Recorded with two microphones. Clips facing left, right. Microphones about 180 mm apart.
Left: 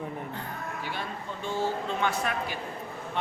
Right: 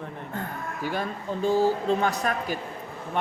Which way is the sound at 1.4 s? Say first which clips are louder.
Right 8 dB; 35° right (ahead or behind).